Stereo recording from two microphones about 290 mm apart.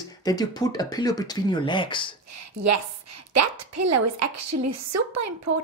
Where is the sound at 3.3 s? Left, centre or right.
Right.